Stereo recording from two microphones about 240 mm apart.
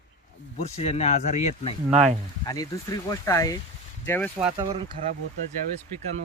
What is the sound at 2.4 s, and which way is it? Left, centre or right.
Speech, centre.